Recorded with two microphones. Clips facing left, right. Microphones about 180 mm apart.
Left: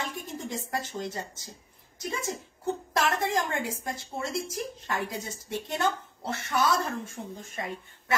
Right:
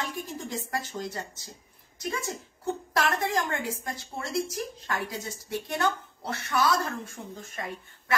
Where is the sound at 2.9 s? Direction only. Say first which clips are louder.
Even; 25° left (ahead or behind).